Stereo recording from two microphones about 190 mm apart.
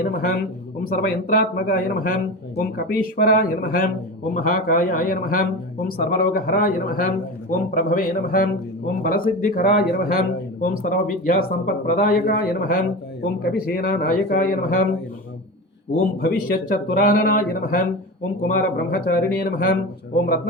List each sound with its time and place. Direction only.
0.0 s speech: 50° left (ahead or behind)
16.0 s speech: 50° left (ahead or behind)